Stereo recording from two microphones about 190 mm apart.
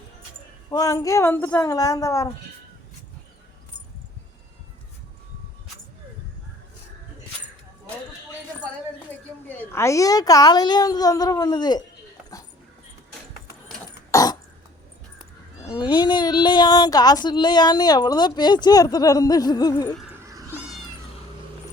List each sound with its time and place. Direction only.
0.7 s a woman's voice: 20° left (ahead or behind)
9.5 s speech: 15° left (ahead or behind)
14.1 s throat clearing: 20° left (ahead or behind)
15.7 s speech: 25° left (ahead or behind)